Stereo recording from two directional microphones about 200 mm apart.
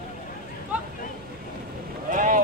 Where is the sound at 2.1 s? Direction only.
40° right (ahead or behind).